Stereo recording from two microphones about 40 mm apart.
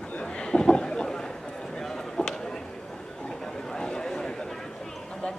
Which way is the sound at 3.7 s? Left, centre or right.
Centre.